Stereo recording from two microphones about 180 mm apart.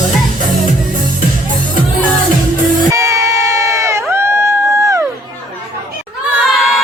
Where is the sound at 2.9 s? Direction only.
15° right (ahead or behind).